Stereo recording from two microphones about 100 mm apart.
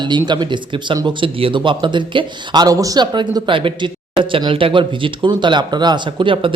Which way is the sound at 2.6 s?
35° right (ahead or behind).